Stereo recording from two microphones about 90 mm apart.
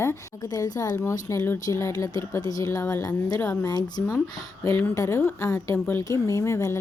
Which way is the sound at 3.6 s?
50° left (ahead or behind).